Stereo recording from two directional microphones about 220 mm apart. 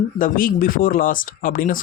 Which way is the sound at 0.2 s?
40° left (ahead or behind).